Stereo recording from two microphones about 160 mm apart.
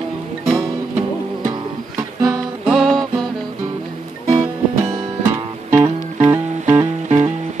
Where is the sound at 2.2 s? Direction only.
Centre (ahead or behind).